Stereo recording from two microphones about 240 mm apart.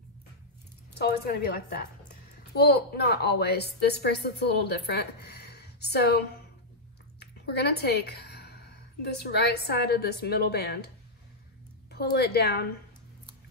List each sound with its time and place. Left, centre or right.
0.9 s speech: left
2.5 s a woman's voice: left
11.9 s a woman's voice: left